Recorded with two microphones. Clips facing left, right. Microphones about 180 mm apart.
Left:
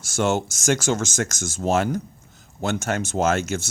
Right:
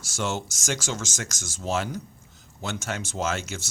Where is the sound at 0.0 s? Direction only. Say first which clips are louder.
Left 8 dB; 50° left (ahead or behind).